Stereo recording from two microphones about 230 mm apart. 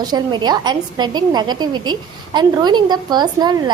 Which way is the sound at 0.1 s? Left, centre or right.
Centre.